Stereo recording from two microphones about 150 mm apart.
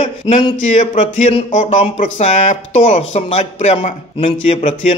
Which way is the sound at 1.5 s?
55° left (ahead or behind).